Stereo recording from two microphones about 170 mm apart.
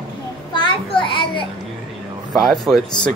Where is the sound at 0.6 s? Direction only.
30° left (ahead or behind).